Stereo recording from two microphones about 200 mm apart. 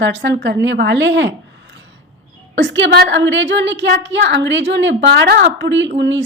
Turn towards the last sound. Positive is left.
turn(degrees=-65)  # may be behind; listen again after turning